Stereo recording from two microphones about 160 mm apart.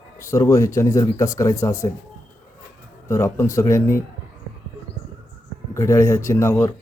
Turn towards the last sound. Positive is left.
turn(degrees=15)  # may be behind; listen again after turning